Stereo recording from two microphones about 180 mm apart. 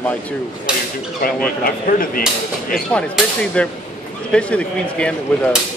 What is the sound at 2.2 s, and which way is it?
A man's voice, 5° left (ahead or behind).